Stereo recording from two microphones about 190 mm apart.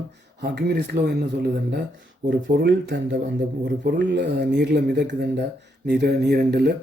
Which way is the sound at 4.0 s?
65° right (ahead or behind).